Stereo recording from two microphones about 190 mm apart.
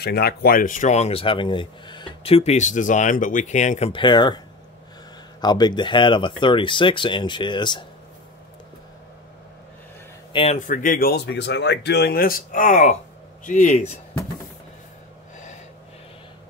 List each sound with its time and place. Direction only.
0.0 s speech: 55° left (ahead or behind); by 3.9 s 40° left (ahead or behind)
3.9 s speech: 25° left (ahead or behind)
5.4 s speech: 20° left (ahead or behind)
10.3 s speech: 30° left (ahead or behind)
10.7 s speech: 45° left (ahead or behind)